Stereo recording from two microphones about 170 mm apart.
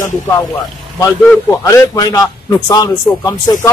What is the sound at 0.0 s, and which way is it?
A man's voice, 25° left (ahead or behind).